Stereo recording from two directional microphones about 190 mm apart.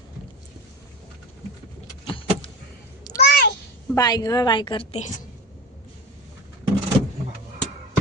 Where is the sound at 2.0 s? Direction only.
30° left (ahead or behind).